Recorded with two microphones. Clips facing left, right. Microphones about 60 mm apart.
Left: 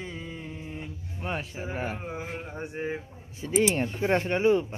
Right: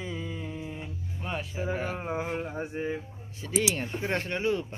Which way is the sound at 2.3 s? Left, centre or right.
Centre.